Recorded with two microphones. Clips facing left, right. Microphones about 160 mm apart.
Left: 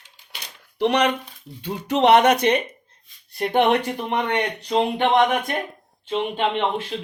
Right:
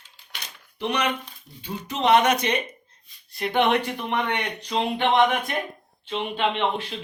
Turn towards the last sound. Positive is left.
turn(degrees=45)  # may be behind; listen again after turning